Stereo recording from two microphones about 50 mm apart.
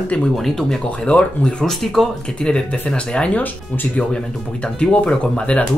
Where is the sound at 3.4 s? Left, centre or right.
Left.